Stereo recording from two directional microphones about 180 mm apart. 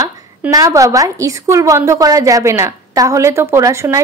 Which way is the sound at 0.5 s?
20° right (ahead or behind).